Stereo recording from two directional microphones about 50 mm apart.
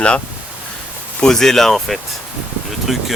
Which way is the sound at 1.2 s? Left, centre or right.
Centre.